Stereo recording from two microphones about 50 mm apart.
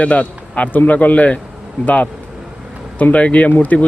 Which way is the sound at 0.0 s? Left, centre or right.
Left.